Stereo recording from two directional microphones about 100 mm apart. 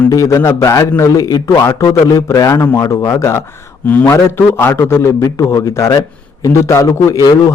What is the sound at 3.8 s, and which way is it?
A man's voice, 20° left (ahead or behind).